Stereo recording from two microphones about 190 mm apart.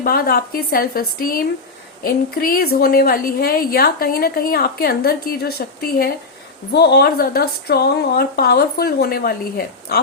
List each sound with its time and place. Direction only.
0.0 s a woman's voice: 50° left (ahead or behind)